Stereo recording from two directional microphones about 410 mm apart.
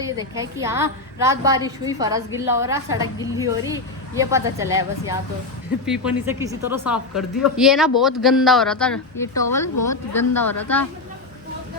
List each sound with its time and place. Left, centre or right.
0.0 s a woman's voice: centre
7.1 s speech: left
7.5 s speech: centre